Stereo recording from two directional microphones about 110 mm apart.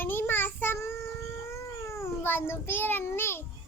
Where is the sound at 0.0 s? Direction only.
20° left (ahead or behind).